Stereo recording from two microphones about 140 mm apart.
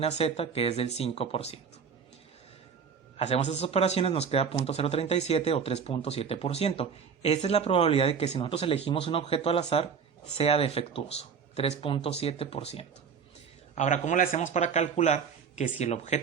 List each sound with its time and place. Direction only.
0.0 s speech: 45° left (ahead or behind)
3.2 s speech: 50° left (ahead or behind)
13.7 s speech: 55° left (ahead or behind)